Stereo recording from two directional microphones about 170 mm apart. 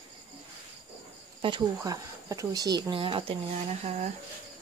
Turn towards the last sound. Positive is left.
turn(degrees=-40)  # may be behind; listen again after turning